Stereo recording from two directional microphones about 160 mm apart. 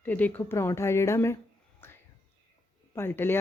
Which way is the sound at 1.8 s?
15° left (ahead or behind).